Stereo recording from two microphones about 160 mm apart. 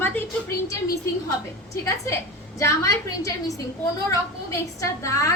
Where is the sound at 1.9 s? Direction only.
20° left (ahead or behind).